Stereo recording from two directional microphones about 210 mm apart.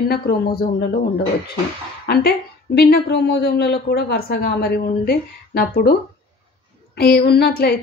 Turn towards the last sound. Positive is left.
turn(degrees=50)  # may be behind; listen again after turning